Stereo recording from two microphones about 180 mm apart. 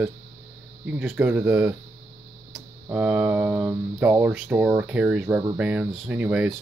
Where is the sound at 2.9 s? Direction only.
10° right (ahead or behind).